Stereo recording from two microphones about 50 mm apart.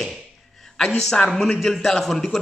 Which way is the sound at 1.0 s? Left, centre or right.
Centre.